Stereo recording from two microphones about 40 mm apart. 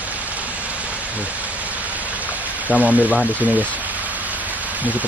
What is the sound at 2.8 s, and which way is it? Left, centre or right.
Speech, right.